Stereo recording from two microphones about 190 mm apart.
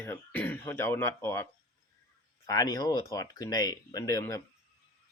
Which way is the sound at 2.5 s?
20° left (ahead or behind).